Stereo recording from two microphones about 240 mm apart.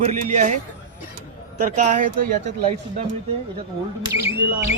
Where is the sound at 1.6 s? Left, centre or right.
Right.